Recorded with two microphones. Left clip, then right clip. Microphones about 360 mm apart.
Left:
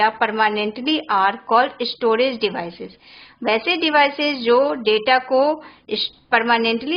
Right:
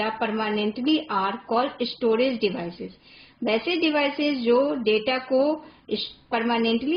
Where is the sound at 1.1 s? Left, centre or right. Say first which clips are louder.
Left 8 dB; left.